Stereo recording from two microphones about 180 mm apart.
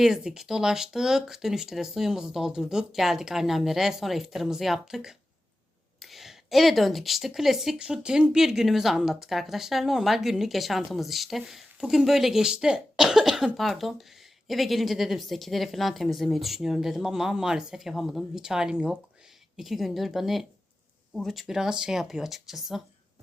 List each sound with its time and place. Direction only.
0.0 s a woman's voice: 5° right (ahead or behind)